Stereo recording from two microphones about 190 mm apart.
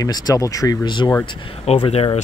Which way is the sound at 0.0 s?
20° left (ahead or behind).